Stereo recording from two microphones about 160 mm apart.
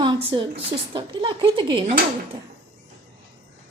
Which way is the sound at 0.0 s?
30° right (ahead or behind).